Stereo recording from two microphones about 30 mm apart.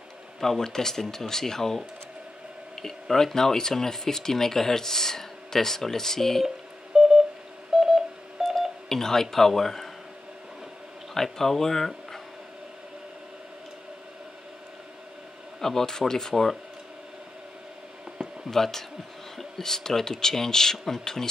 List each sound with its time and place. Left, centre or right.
0.4 s speech: centre
2.8 s speech: centre
6.4 s telephone dialing: centre
8.8 s speech: centre
11.3 s speech: centre
15.6 s speech: centre
18.5 s speech: centre